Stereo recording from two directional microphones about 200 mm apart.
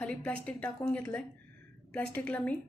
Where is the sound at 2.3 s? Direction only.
5° left (ahead or behind).